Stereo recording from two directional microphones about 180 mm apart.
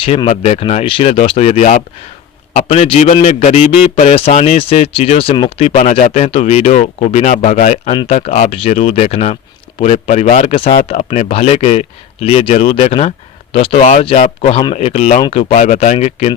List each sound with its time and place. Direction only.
0.0 s a man's voice: 30° left (ahead or behind)
10.5 s a man's voice: 30° left (ahead or behind)